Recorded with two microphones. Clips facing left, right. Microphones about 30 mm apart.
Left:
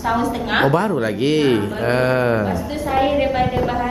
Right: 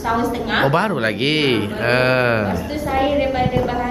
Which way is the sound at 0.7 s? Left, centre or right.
Right.